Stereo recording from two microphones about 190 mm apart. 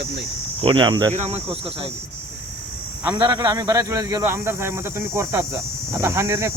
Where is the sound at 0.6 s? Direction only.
25° right (ahead or behind).